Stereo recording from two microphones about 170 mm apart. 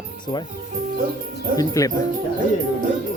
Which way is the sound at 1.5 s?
20° left (ahead or behind).